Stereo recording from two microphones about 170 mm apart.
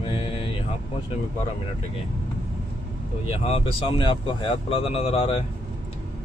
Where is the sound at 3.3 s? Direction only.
35° left (ahead or behind).